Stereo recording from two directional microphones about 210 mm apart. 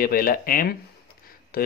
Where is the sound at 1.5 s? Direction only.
45° left (ahead or behind).